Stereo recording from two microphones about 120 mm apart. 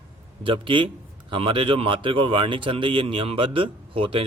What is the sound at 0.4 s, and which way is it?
Speech, 45° right (ahead or behind).